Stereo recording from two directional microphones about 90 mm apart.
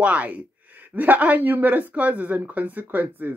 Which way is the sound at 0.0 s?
15° right (ahead or behind).